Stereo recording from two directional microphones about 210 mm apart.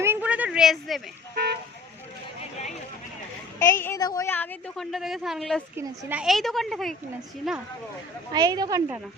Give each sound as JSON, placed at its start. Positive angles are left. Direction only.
{"t": 0.0, "sound": "a sound", "side_deg": -10}
{"t": 3.6, "sound": "a woman's voice", "side_deg": 10}
{"t": 5.7, "sound": "speech", "side_deg": -15}
{"t": 8.3, "sound": "a woman's voice", "side_deg": -20}